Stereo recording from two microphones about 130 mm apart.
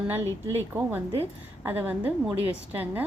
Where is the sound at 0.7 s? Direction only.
15° right (ahead or behind).